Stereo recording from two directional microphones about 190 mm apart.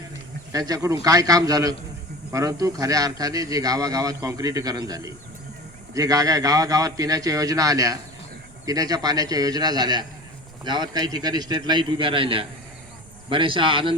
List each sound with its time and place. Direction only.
0.5 s speech: 20° right (ahead or behind)